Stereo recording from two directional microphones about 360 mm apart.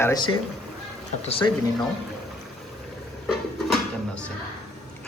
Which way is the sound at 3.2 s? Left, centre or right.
Centre.